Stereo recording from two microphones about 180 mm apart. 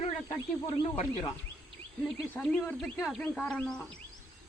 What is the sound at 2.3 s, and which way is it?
Speech, 5° left (ahead or behind).